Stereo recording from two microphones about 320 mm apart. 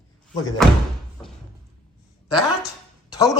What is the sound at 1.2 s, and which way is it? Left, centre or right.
Door, centre.